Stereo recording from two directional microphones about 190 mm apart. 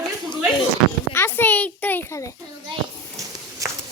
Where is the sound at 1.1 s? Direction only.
10° left (ahead or behind).